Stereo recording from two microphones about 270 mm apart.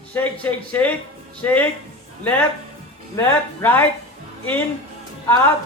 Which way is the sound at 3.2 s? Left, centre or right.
Centre.